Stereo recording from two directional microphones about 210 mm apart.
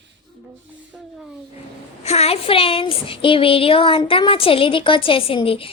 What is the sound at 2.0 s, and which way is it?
Child singing, 30° left (ahead or behind).